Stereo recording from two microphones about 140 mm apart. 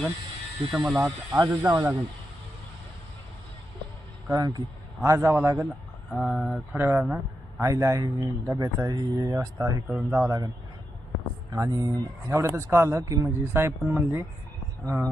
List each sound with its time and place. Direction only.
0.7 s speech: centre (ahead or behind)
0.9 s speech: 20° right (ahead or behind)
4.3 s speech: 25° right (ahead or behind)
6.1 s speech: centre (ahead or behind)
6.7 s speech: 15° right (ahead or behind)
7.6 s speech: 20° right (ahead or behind)
11.5 s speech: 25° right (ahead or behind)